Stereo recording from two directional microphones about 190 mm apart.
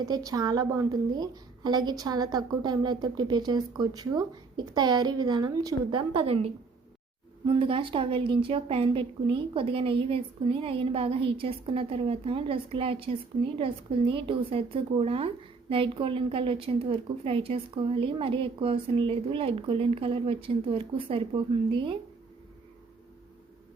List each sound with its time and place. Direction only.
0.0 s a woman's voice: 20° right (ahead or behind)